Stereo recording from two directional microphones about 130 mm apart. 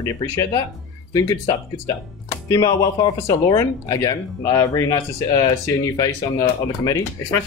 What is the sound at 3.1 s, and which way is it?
A woman's voice, 25° left (ahead or behind).